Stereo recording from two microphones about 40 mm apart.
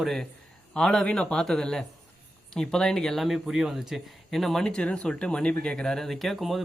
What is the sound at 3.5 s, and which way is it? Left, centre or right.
Speech, centre.